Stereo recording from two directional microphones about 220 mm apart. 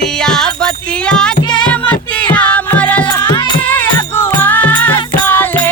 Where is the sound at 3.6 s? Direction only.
5° left (ahead or behind).